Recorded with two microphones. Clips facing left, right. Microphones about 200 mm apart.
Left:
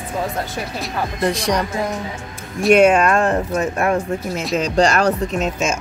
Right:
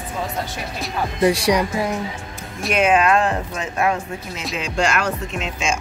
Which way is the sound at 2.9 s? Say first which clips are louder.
Left 1 dB; 50° left (ahead or behind).